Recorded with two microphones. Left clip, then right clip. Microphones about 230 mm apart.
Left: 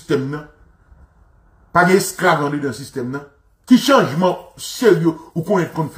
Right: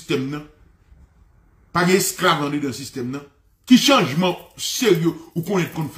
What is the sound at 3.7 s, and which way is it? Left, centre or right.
Speech, centre.